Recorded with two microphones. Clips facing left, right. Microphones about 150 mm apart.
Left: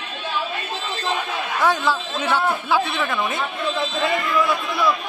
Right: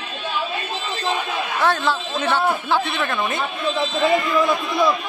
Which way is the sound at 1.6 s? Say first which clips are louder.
Left 1 dB; 10° left (ahead or behind).